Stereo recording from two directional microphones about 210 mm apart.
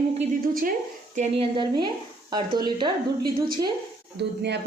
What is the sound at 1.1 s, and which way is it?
Speech, 30° right (ahead or behind).